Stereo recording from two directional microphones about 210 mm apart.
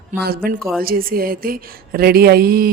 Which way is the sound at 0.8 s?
45° right (ahead or behind).